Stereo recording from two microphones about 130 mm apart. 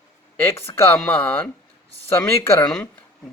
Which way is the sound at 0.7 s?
15° left (ahead or behind).